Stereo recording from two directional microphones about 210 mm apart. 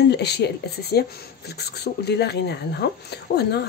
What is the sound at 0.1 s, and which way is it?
Speech, 50° left (ahead or behind).